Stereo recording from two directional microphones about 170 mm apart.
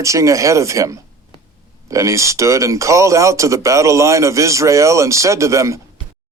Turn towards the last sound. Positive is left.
turn(degrees=-15)  # may be behind; listen again after turning